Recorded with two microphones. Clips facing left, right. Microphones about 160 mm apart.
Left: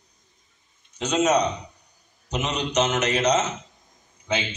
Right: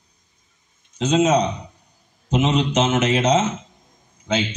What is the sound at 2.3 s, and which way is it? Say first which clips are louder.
Speech: right 8 dB; 90° right.